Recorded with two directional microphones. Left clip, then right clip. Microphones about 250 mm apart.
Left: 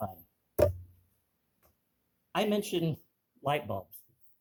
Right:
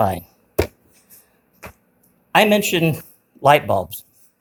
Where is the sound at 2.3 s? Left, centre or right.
Right.